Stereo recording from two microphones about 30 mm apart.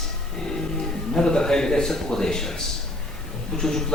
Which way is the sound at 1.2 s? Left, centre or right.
Left.